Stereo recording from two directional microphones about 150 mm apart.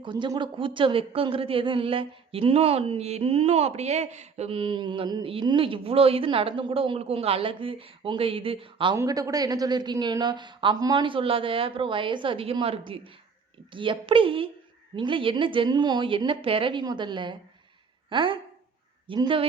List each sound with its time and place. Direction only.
0.0 s speech: 30° right (ahead or behind)
9.0 s speech: 25° right (ahead or behind)